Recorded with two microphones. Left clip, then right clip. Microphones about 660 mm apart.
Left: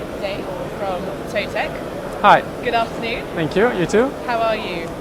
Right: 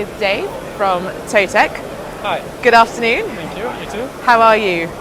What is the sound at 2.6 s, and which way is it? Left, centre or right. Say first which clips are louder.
Speech: right 10 dB; right.